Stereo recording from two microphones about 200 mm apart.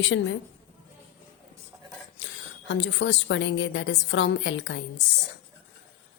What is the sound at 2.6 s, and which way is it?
A woman's voice, 60° left (ahead or behind).